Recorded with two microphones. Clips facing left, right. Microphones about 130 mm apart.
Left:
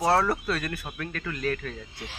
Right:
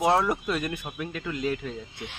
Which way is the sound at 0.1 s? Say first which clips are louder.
Even; 15° right (ahead or behind).